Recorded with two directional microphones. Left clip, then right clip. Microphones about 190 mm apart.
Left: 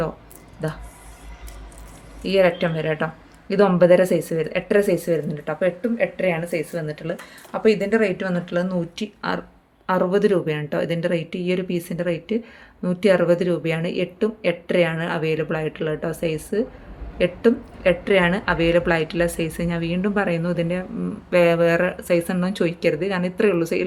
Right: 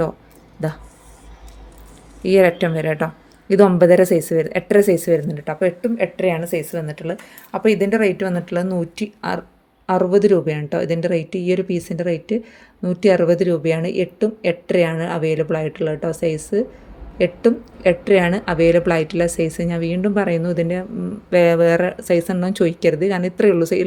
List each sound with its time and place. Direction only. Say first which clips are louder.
0.6 s speech: right 3 dB; 35° right (ahead or behind)
2.2 s a woman's voice: right 4 dB; 40° right (ahead or behind)